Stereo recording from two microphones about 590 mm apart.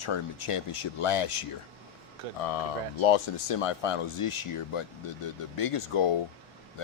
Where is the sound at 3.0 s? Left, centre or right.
Left.